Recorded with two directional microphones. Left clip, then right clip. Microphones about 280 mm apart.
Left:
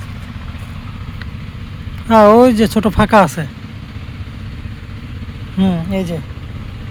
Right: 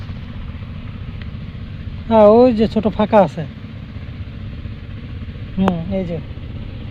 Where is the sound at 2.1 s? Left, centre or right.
Left.